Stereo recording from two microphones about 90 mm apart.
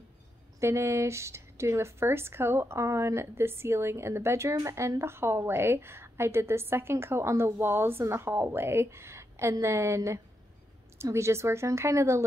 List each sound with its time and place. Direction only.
0.6 s a woman's voice: 30° right (ahead or behind)